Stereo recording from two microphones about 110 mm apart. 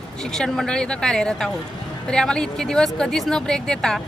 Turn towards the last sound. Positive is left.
turn(degrees=5)  # may be behind; listen again after turning